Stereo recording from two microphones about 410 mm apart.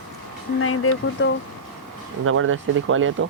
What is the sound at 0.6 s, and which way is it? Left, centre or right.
Speech, left.